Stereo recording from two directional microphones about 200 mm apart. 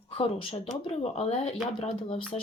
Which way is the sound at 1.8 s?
25° left (ahead or behind).